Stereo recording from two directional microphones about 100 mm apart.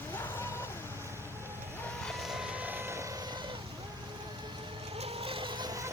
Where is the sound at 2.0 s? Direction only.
Centre (ahead or behind); by 3.6 s 55° right (ahead or behind).